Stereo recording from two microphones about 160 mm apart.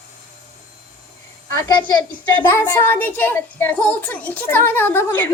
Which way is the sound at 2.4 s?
15° left (ahead or behind).